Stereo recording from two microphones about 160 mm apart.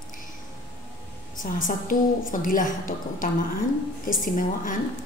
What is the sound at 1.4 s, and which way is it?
A woman's voice, 55° left (ahead or behind).